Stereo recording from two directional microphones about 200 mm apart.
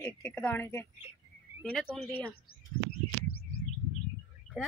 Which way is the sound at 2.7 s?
20° left (ahead or behind).